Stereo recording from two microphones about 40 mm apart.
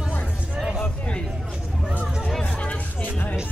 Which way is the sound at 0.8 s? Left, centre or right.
Left.